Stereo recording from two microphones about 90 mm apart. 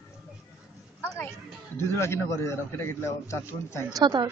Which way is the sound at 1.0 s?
25° left (ahead or behind).